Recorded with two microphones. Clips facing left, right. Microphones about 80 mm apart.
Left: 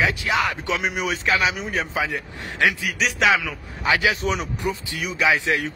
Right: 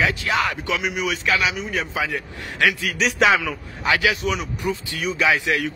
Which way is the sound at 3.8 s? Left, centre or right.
Left.